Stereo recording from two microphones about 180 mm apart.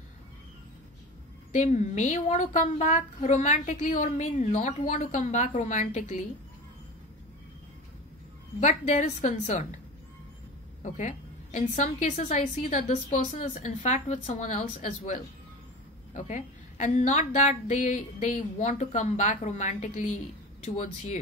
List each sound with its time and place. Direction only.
1.5 s a woman's voice: 40° left (ahead or behind)
8.5 s a woman's voice: 40° left (ahead or behind)
10.8 s a woman's voice: 45° left (ahead or behind)